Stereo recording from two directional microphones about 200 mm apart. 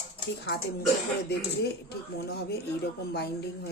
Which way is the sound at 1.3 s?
55° left (ahead or behind).